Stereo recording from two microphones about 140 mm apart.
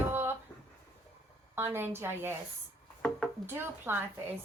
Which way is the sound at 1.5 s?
15° right (ahead or behind).